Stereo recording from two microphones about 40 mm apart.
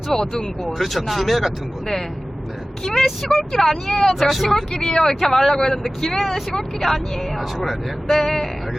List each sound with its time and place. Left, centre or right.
0.1 s speech: centre
0.6 s speech: centre
2.8 s speech: centre
4.7 s speech: centre